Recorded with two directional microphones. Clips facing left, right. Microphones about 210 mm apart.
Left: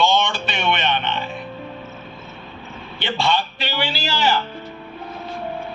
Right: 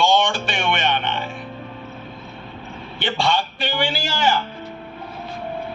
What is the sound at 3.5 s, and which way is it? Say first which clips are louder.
Speech: right 2 dB; 50° right (ahead or behind).